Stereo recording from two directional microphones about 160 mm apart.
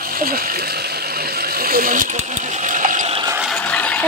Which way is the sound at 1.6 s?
65° right (ahead or behind).